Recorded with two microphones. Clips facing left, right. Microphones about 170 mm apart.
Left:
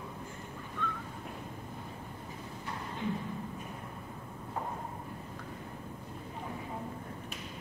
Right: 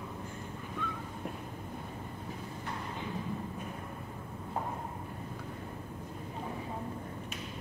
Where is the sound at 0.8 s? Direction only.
10° right (ahead or behind).